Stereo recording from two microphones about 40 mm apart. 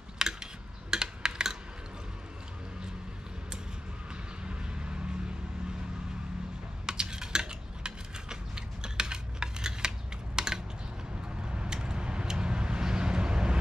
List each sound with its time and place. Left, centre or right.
0.2 s typing: centre
6.9 s typing: centre
11.5 s vehicle: right